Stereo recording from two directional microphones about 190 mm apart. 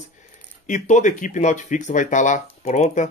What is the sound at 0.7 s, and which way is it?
Speech, 40° left (ahead or behind).